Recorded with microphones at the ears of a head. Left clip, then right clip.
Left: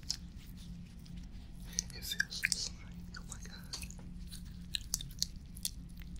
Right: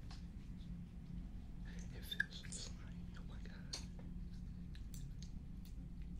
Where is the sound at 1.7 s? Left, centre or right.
Left.